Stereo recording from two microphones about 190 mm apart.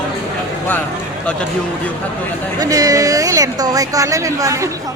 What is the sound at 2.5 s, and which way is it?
Speech, 20° right (ahead or behind).